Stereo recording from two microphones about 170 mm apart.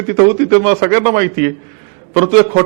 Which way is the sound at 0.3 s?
15° right (ahead or behind).